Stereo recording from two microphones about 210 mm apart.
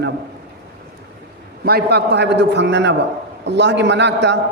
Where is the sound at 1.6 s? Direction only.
50° right (ahead or behind).